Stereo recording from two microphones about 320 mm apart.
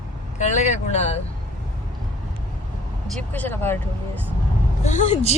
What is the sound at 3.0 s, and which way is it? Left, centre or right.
Speech, centre.